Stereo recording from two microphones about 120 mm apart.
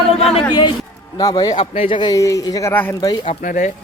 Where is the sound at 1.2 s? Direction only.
30° left (ahead or behind).